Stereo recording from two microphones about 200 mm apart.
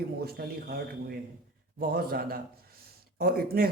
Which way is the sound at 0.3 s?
50° right (ahead or behind).